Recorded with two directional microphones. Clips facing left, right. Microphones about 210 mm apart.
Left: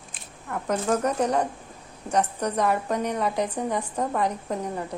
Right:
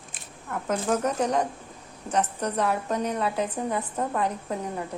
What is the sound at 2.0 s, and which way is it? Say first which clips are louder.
A woman's voice: left 2 dB; 10° left (ahead or behind).